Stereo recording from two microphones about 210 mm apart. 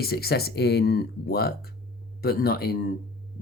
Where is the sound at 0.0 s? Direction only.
50° left (ahead or behind).